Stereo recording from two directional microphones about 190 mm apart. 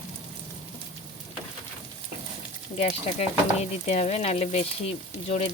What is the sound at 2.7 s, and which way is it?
Stir, 35° left (ahead or behind).